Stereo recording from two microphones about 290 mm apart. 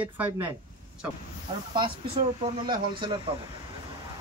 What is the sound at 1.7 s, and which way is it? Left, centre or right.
Speech, centre.